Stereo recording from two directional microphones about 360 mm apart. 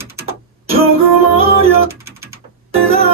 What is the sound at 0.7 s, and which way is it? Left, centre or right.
Music, centre.